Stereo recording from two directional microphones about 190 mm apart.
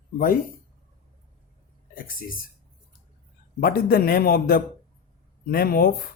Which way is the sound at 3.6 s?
50° left (ahead or behind).